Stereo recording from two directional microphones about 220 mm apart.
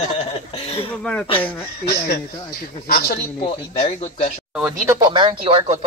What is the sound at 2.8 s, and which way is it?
Speech, 45° left (ahead or behind).